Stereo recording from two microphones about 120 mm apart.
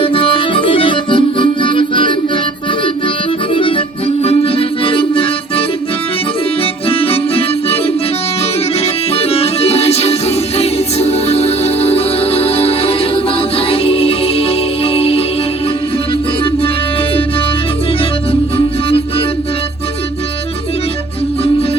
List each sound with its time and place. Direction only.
0.0 s accordion: 50° left (ahead or behind)
3.5 s accordion: 45° left (ahead or behind)
6.8 s music: 50° left (ahead or behind)
8.8 s music: 60° left (ahead or behind)
18.3 s music: 50° left (ahead or behind)